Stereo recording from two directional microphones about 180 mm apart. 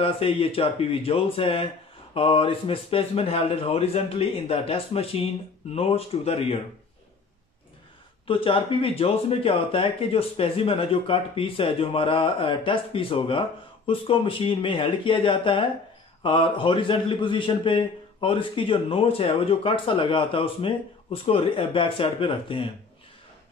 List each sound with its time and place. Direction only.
0.0 s speech: 30° left (ahead or behind)
8.3 s speech: 30° left (ahead or behind)